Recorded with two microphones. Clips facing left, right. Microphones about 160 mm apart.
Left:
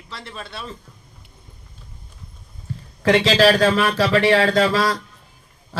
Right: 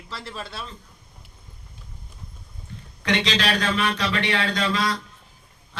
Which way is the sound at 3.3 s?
35° left (ahead or behind).